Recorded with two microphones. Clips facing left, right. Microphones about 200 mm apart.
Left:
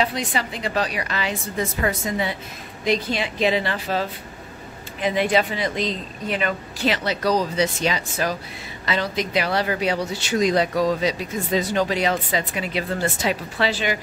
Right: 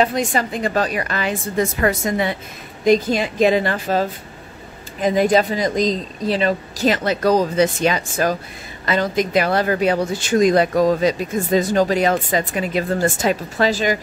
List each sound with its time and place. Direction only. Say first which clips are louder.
0.0 s speech: right 5 dB; 45° right (ahead or behind)
1.6 s a woman's voice: right 6 dB; 75° right (ahead or behind)
2.8 s speech: right 7 dB; 45° right (ahead or behind)